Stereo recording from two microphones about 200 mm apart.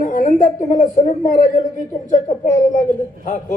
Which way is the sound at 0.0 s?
40° left (ahead or behind).